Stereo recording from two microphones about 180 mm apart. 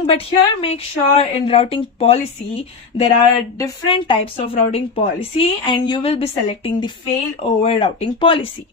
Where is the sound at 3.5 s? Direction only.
25° left (ahead or behind).